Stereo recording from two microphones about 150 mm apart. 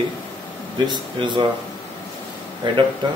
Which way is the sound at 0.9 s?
35° right (ahead or behind).